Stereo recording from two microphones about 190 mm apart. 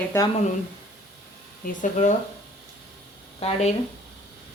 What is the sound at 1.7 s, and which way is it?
Speech, 40° left (ahead or behind).